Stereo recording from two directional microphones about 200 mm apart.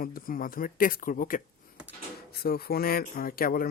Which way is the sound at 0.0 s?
45° left (ahead or behind).